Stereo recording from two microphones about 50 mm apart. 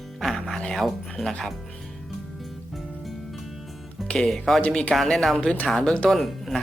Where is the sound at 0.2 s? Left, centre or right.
Centre.